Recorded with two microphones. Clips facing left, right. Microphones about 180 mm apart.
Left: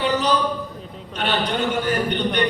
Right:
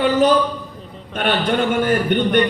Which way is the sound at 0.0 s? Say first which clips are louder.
Right 6 dB; 50° right (ahead or behind).